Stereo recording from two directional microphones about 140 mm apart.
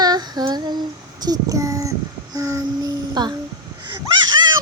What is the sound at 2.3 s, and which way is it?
Child singing, 25° right (ahead or behind).